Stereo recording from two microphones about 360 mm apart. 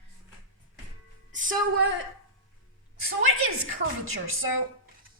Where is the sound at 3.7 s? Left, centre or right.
Right.